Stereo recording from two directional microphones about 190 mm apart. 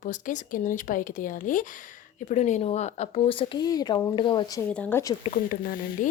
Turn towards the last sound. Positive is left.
turn(degrees=45)  # may be behind; listen again after turning